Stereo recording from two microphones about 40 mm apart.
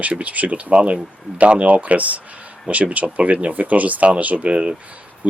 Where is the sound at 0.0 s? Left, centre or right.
Right.